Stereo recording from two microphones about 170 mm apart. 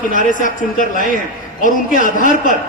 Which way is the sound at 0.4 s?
50° left (ahead or behind).